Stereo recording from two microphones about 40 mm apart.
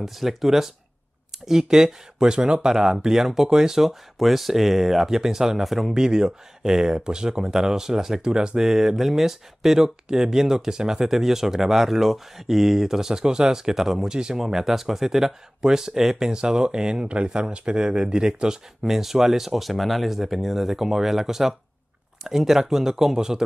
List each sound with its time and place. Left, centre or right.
0.0 s speech: centre
5.9 s speech: centre
18.8 s speech: centre